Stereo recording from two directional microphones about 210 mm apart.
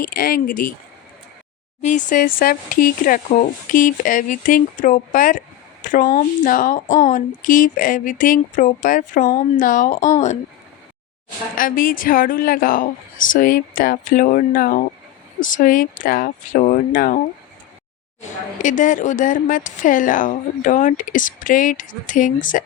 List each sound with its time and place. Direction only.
0.0 s speech: 45° left (ahead or behind)
1.8 s speech: 35° left (ahead or behind)
11.5 s speech: 40° left (ahead or behind)
18.2 s speech: 35° left (ahead or behind)